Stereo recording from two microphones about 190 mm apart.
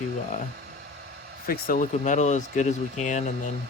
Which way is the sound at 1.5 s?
45° left (ahead or behind).